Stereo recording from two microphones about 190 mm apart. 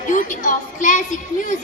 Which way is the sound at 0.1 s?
45° left (ahead or behind).